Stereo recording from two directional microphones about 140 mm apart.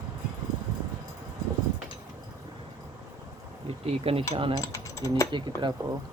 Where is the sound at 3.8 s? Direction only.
45° right (ahead or behind).